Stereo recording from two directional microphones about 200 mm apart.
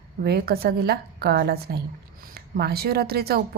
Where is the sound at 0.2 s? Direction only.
50° right (ahead or behind).